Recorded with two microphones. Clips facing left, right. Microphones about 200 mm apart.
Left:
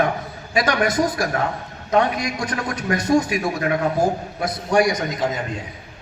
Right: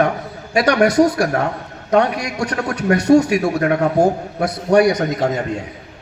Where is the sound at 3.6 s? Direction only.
50° right (ahead or behind).